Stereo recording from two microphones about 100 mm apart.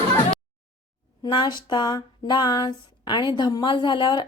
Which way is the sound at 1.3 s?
50° left (ahead or behind).